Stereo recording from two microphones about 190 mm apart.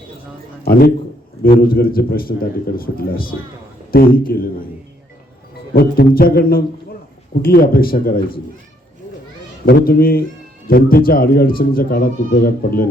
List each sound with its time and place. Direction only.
0.6 s a man's voice: 55° left (ahead or behind)
5.7 s speech: 50° left (ahead or behind)
9.6 s speech: 50° left (ahead or behind)